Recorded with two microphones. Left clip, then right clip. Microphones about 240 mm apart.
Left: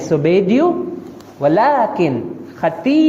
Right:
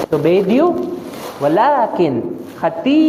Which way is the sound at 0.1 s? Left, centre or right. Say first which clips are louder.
Left 1 dB; left.